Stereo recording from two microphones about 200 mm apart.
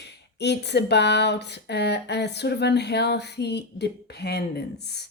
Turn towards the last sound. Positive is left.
turn(degrees=55)  # may be behind; listen again after turning